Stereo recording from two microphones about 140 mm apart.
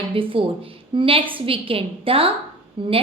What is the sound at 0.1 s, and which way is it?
A woman's voice, 40° right (ahead or behind).